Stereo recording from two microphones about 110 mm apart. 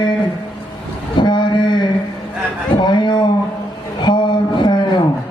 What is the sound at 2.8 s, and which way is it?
Speech, 45° left (ahead or behind).